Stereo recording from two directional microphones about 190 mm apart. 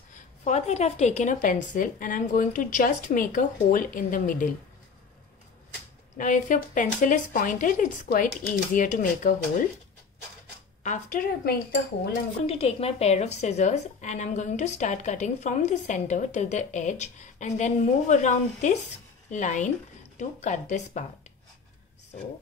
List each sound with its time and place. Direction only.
0.1 s a woman's voice: 35° left (ahead or behind)
6.1 s a woman's voice: 45° left (ahead or behind)
10.8 s a woman's voice: 40° left (ahead or behind)
12.4 s a woman's voice: 30° left (ahead or behind)